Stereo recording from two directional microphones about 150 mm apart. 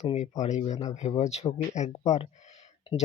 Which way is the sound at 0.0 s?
50° left (ahead or behind).